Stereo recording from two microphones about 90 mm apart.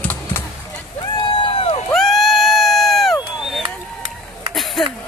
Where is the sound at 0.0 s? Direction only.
20° left (ahead or behind).